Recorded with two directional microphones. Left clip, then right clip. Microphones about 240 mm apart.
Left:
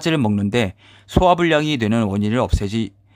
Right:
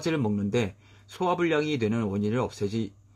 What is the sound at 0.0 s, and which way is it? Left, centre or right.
Speech, left.